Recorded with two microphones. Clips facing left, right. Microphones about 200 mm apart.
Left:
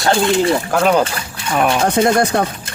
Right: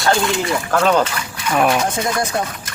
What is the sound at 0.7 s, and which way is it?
Speech, 10° left (ahead or behind).